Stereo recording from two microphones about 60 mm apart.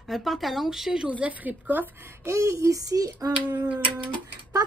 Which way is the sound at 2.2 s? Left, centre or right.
Right.